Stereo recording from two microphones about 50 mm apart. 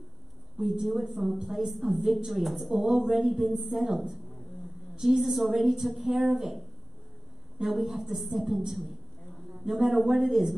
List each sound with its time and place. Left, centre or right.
0.6 s a woman's voice: centre